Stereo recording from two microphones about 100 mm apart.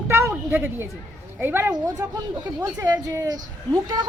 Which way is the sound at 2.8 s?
40° right (ahead or behind).